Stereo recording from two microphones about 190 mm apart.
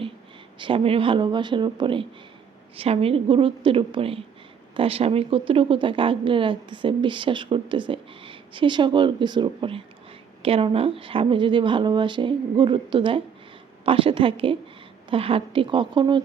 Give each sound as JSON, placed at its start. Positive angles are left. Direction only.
{"t": 0.6, "sound": "a woman's voice", "side_deg": -30}